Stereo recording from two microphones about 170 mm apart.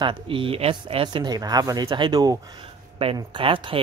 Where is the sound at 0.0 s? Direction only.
30° right (ahead or behind).